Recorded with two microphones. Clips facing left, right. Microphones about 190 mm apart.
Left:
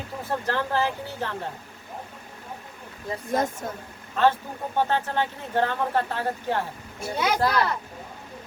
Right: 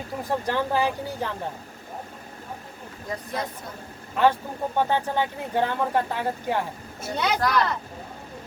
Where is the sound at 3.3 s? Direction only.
45° left (ahead or behind).